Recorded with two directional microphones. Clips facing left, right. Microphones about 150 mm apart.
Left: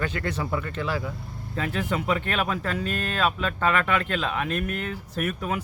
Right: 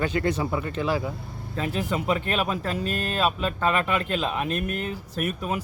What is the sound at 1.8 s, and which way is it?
Speech, 35° right (ahead or behind).